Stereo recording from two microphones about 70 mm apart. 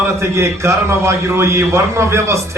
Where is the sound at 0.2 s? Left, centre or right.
Right.